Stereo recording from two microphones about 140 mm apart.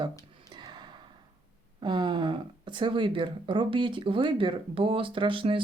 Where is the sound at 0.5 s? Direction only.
30° right (ahead or behind).